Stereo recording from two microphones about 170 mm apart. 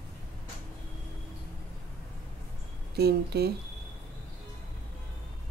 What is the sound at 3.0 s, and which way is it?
Speech, 70° right (ahead or behind).